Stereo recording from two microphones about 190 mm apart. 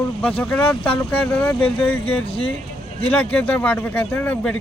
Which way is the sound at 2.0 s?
30° left (ahead or behind).